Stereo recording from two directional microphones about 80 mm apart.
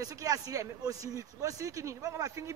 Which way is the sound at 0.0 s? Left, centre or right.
Right.